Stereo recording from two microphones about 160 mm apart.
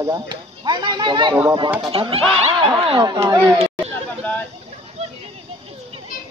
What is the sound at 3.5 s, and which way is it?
Chatter, 40° right (ahead or behind).